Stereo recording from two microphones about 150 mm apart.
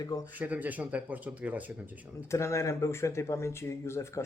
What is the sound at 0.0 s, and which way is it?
Speech, 25° left (ahead or behind).